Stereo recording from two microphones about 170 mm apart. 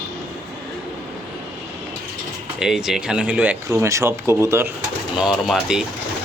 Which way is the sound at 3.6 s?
20° right (ahead or behind).